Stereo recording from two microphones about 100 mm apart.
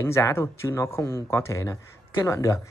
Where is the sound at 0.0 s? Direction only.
25° left (ahead or behind).